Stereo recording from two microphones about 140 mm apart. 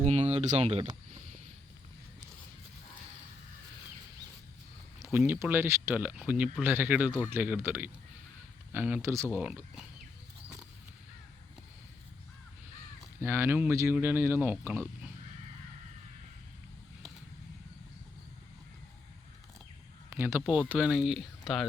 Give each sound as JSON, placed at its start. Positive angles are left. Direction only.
{"t": 0.0, "sound": "a sound", "side_deg": -50}
{"t": 4.9, "sound": "speech", "side_deg": -20}
{"t": 13.1, "sound": "speech", "side_deg": -15}
{"t": 20.1, "sound": "speech", "side_deg": -20}
{"t": 20.4, "sound": "speech", "side_deg": -5}